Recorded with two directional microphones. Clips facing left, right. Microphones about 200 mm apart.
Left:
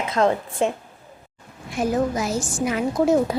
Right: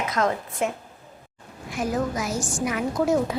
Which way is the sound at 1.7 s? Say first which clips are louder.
Left 4 dB; 30° left (ahead or behind).